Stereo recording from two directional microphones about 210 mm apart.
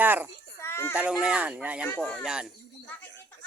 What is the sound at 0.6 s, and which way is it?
Children playing, 10° left (ahead or behind).